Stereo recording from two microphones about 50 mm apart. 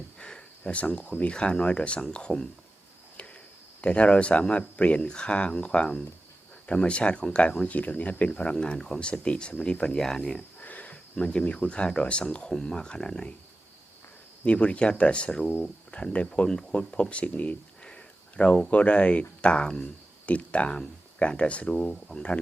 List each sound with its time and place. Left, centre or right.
0.2 s speech: centre
3.8 s speech: left
8.5 s speech: centre
10.6 s a sound: left
11.9 s speech: left
14.4 s speech: left
17.8 s a sound: left
18.7 s speech: left